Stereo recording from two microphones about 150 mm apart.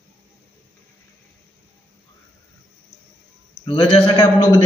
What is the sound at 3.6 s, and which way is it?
A man's voice, 35° left (ahead or behind).